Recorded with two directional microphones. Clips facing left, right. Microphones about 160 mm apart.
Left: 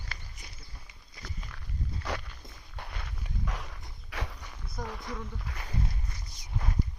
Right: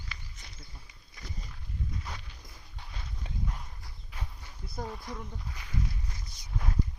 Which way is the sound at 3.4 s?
90° left.